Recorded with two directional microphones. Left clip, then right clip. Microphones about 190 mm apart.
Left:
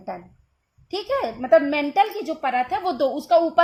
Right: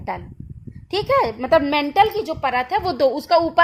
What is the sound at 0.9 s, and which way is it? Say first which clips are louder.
A woman's voice: right 6 dB; 45° right (ahead or behind).